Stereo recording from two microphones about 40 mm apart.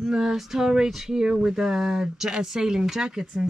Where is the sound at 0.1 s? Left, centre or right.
Centre.